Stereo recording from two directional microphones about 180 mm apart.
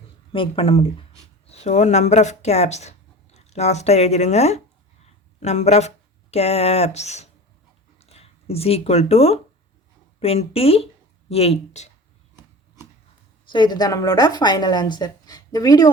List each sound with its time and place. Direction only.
0.3 s speech: 30° left (ahead or behind)
13.5 s a woman's voice: 25° left (ahead or behind)